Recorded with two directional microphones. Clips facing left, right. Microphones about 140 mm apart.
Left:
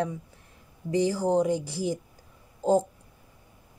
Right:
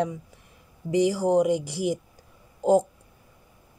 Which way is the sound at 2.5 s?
15° right (ahead or behind).